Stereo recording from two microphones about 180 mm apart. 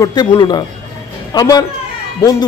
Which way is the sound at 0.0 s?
25° left (ahead or behind).